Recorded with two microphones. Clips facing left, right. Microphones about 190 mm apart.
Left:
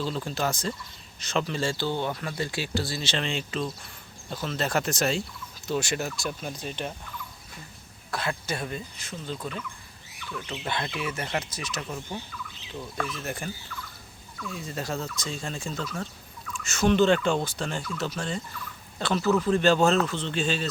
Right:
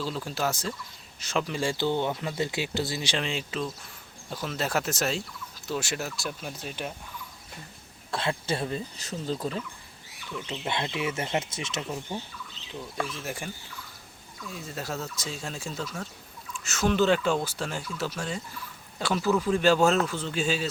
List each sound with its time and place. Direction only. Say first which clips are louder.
0.0 s speech: left 1 dB; 5° right (ahead or behind)
8.1 s speech: right 2 dB; 30° right (ahead or behind)
10.3 s speech: right 1 dB; 20° right (ahead or behind)
13.0 s speech: left 1 dB; 10° right (ahead or behind)
14.5 s speech: left 2 dB; 5° right (ahead or behind)